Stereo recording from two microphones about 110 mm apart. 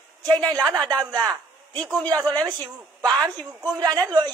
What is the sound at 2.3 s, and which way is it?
A woman's voice, 35° right (ahead or behind).